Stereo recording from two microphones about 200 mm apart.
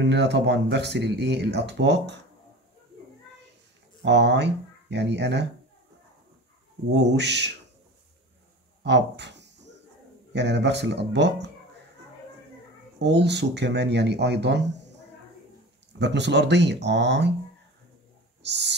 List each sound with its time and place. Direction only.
0.0 s speech: 60° right (ahead or behind)
4.0 s speech: 60° right (ahead or behind)
6.9 s speech: 60° right (ahead or behind)
8.8 s speech: 60° right (ahead or behind)
13.0 s speech: 60° right (ahead or behind)
16.0 s speech: 60° right (ahead or behind)
18.4 s owl: 60° right (ahead or behind)